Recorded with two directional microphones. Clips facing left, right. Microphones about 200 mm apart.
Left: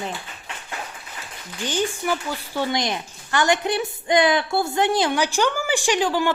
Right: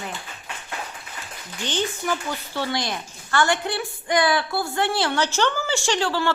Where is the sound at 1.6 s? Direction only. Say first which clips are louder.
Left 2 dB; 10° left (ahead or behind).